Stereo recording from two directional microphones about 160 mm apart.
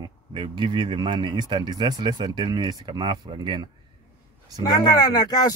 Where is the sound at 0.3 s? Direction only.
30° right (ahead or behind).